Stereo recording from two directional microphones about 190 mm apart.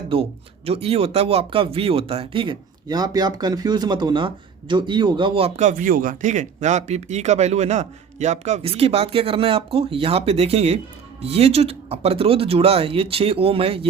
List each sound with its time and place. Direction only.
0.1 s speech: 30° right (ahead or behind)